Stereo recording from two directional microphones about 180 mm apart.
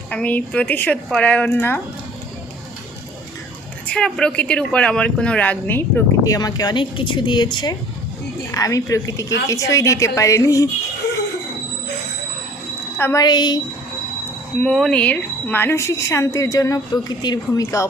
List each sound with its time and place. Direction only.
0.1 s speech: 10° left (ahead or behind)
3.8 s a woman's voice: 5° left (ahead or behind)
13.0 s a woman's voice: 15° left (ahead or behind)
14.6 s speech: centre (ahead or behind); by 17.8 s 20° left (ahead or behind)